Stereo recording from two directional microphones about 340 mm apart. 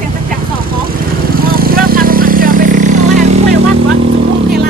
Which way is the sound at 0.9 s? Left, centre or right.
Right.